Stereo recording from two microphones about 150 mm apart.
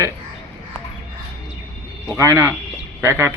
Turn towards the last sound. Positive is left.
turn(degrees=-15)  # may be behind; listen again after turning